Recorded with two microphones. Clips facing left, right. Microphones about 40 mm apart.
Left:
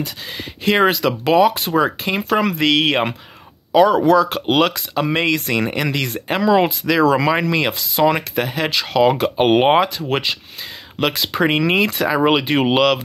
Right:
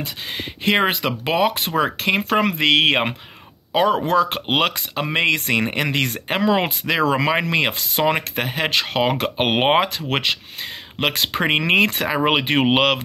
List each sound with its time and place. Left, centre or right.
0.0 s speech: right
2.4 s speech: right
11.0 s speech: right
11.7 s speech: right